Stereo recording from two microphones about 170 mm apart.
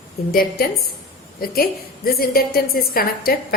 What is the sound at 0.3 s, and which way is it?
A woman's voice, 60° left (ahead or behind).